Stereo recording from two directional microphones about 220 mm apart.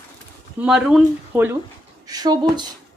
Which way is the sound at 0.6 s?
5° right (ahead or behind).